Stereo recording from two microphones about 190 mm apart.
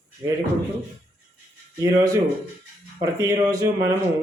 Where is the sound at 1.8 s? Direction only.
15° right (ahead or behind).